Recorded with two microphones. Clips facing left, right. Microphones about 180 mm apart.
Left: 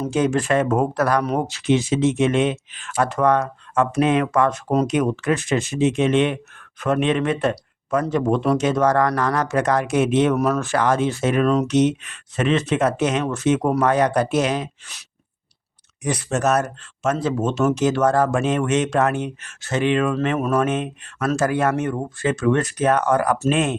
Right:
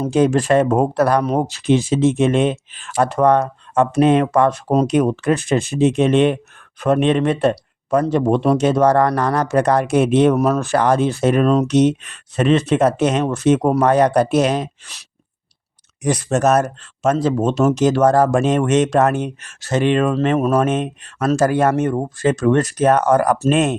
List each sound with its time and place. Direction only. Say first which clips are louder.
0.0 s speech: right 4 dB; 35° right (ahead or behind)
16.0 s speech: right 5 dB; 45° right (ahead or behind)
17.3 s speech: right 4 dB; 30° right (ahead or behind)